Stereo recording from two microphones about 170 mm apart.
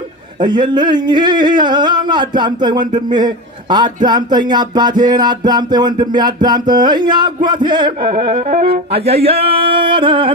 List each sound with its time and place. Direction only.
0.4 s speech: 25° right (ahead or behind)